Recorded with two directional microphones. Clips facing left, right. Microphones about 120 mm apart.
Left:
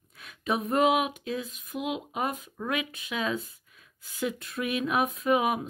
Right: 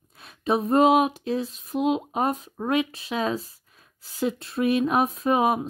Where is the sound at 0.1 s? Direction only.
30° right (ahead or behind).